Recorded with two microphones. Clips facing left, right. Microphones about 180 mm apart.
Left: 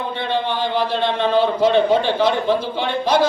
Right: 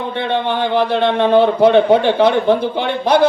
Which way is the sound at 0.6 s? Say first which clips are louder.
Right 5 dB; 60° right (ahead or behind).